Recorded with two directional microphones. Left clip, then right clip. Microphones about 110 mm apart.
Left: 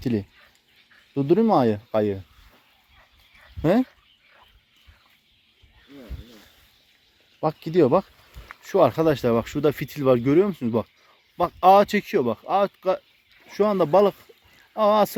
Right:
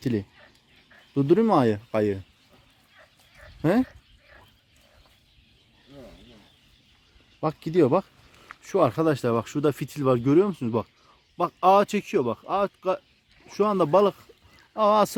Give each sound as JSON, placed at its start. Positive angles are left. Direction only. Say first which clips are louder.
{"t": 0.0, "sound": "speech", "louder": "left 1 dB", "side_deg": -15}
{"t": 1.1, "sound": "speech", "louder": "left 1 dB", "side_deg": -30}
{"t": 3.6, "sound": "speech", "louder": "left 2 dB", "side_deg": -10}
{"t": 7.3, "sound": "speech", "louder": "left 2 dB", "side_deg": -15}
{"t": 13.5, "sound": "speech", "louder": "left 2 dB", "side_deg": -20}
{"t": 14.8, "sound": "speech", "louder": "left 1 dB", "side_deg": -35}